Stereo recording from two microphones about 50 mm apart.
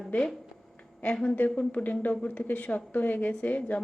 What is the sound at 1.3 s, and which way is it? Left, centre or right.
A woman's voice, left.